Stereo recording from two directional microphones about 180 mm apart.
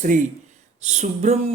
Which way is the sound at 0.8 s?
40° right (ahead or behind).